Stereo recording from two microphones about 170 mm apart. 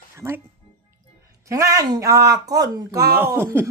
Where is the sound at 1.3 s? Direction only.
20° right (ahead or behind).